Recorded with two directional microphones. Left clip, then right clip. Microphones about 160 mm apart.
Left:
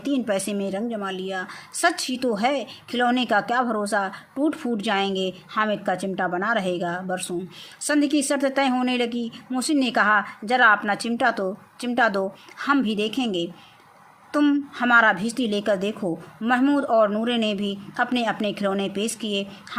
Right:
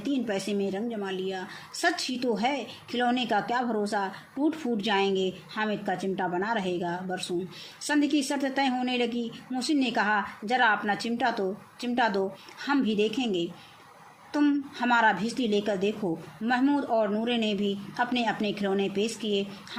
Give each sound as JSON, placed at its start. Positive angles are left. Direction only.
{"t": 0.0, "sound": "a woman's voice", "side_deg": 55}